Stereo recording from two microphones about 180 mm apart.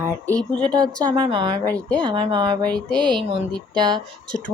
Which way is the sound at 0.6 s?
25° right (ahead or behind).